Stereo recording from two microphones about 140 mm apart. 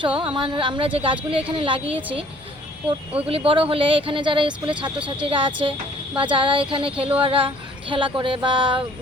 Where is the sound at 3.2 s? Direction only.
40° right (ahead or behind).